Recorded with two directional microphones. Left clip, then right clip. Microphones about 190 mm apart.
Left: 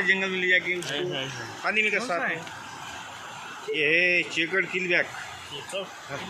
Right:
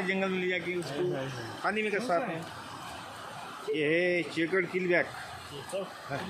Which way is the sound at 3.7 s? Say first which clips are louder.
Left 6 dB; 65° right (ahead or behind).